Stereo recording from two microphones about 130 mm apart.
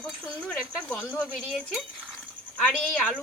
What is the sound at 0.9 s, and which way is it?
Speech, 15° left (ahead or behind).